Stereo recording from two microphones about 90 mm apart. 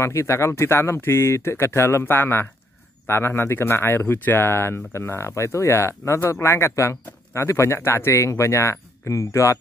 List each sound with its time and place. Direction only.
0.0 s speech: 30° left (ahead or behind)